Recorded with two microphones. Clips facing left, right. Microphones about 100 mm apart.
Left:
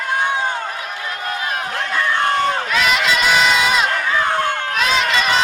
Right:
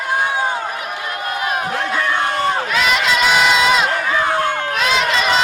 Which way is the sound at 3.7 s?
Centre (ahead or behind).